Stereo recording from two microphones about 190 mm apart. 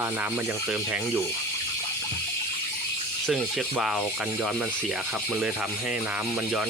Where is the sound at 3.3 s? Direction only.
5° left (ahead or behind).